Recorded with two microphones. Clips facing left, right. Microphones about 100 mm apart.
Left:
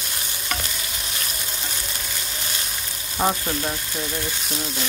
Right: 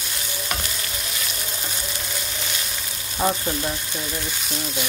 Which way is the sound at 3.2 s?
20° left (ahead or behind).